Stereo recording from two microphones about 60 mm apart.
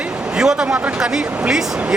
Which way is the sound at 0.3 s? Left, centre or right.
Centre.